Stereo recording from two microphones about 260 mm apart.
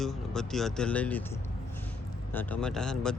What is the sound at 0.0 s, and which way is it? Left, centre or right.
Speech, centre.